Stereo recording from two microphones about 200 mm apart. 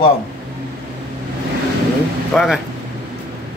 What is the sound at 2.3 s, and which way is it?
Speech, centre (ahead or behind).